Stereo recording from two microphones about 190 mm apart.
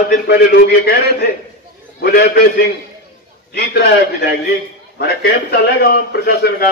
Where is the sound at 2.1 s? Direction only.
55° left (ahead or behind).